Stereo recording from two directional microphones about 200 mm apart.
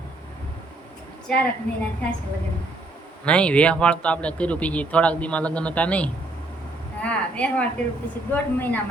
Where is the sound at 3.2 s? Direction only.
5° left (ahead or behind).